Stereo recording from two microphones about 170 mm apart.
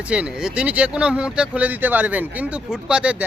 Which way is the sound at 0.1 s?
5° right (ahead or behind).